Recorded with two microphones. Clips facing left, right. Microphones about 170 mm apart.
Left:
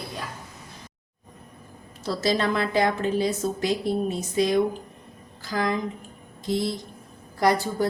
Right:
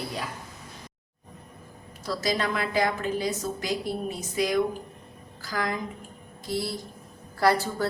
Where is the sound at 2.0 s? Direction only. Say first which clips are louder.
Left 4 dB; 25° left (ahead or behind).